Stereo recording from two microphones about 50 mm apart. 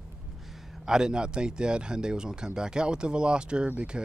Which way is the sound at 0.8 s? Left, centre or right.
Centre.